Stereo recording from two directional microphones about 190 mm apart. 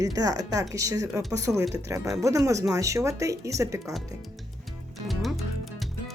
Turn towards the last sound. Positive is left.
turn(degrees=0)  # may be behind; listen again after turning